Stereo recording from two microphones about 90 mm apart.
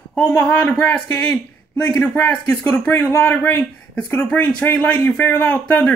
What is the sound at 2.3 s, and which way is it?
Speech, 15° left (ahead or behind).